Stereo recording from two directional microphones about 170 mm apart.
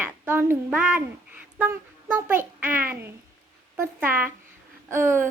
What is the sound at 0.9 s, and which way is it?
A child's voice, 10° right (ahead or behind).